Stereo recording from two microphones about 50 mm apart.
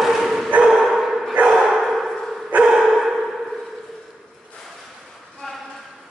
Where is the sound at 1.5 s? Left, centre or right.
Centre.